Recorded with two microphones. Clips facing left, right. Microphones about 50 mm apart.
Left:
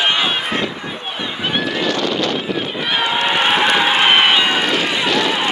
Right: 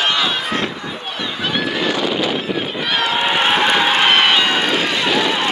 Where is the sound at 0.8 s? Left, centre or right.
Centre.